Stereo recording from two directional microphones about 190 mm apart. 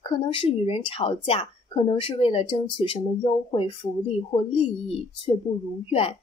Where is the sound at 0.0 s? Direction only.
25° left (ahead or behind).